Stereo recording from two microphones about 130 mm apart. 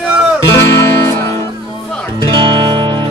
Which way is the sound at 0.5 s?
20° left (ahead or behind).